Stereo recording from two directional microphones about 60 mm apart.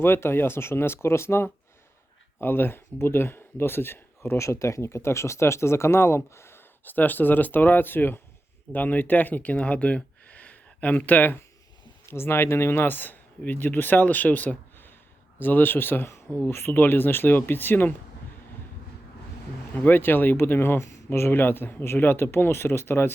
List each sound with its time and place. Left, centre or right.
0.0 s speech: left
6.8 s speech: left
12.0 s speech: left
19.7 s speech: left